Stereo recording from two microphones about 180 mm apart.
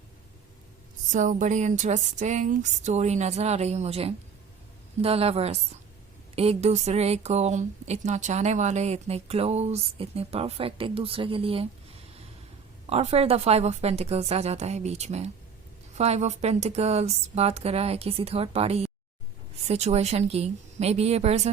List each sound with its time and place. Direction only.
1.1 s speech: 45° right (ahead or behind)
12.9 s speech: 35° right (ahead or behind)